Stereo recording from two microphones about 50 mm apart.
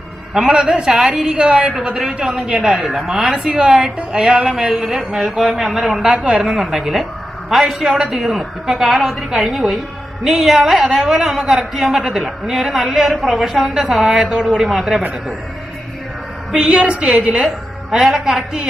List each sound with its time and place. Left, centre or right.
0.3 s speech: centre
6.0 s a woman's voice: right
6.4 s speech: centre
16.5 s a woman's voice: centre
17.9 s speech: centre